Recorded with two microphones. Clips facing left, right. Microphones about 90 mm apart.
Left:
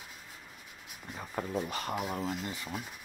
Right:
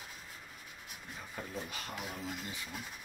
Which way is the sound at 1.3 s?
70° left (ahead or behind).